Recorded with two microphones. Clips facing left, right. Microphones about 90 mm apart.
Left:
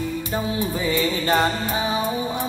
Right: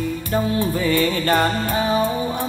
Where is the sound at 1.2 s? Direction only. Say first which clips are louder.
Right 2 dB; 15° left (ahead or behind).